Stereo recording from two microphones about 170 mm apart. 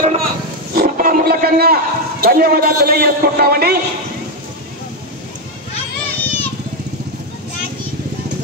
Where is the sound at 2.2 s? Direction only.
60° right (ahead or behind).